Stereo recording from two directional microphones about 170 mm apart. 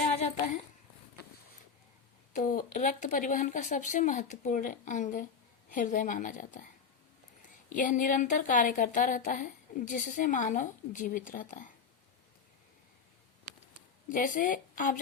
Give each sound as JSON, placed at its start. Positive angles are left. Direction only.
{"t": 2.3, "sound": "speech", "side_deg": 50}
{"t": 7.7, "sound": "speech", "side_deg": 50}
{"t": 14.1, "sound": "speech", "side_deg": 55}